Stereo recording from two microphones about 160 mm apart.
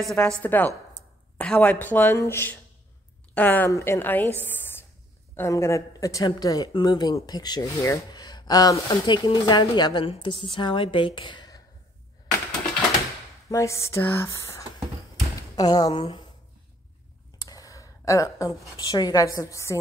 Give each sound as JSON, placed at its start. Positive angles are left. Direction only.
{"t": 0.0, "sound": "a woman's voice", "side_deg": 5}
{"t": 4.5, "sound": "a sound", "side_deg": 15}
{"t": 5.3, "sound": "speech", "side_deg": 15}
{"t": 13.5, "sound": "speech", "side_deg": 20}
{"t": 17.4, "sound": "a woman's voice", "side_deg": 20}